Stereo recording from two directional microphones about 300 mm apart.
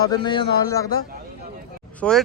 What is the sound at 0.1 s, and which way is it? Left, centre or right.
Speech, centre.